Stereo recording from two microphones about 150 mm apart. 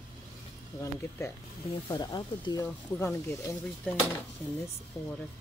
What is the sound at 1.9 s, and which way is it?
Speech, 30° left (ahead or behind).